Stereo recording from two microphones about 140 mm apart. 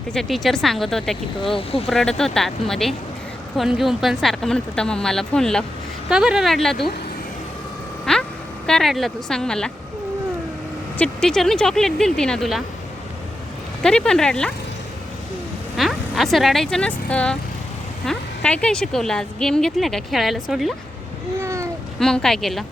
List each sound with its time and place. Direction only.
0.1 s speech: centre (ahead or behind)
1.5 s speech: 45° left (ahead or behind)
1.9 s speech: 5° left (ahead or behind)
8.1 s vehicle: 5° left (ahead or behind)
8.6 s speech: 5° left (ahead or behind)
10.9 s speech: 5° left (ahead or behind)
13.8 s speech: 5° left (ahead or behind)
15.8 s speech: centre (ahead or behind)
21.3 s a sound: 20° right (ahead or behind)
21.9 s speech: 5° left (ahead or behind)